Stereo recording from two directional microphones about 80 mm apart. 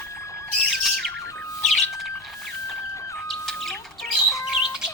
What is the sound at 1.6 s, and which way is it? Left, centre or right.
Bird, centre.